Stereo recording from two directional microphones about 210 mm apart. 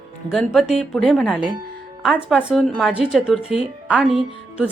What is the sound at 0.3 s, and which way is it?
Speech, centre (ahead or behind).